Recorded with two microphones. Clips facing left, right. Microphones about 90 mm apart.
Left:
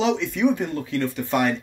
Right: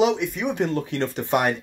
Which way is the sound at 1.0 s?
25° right (ahead or behind).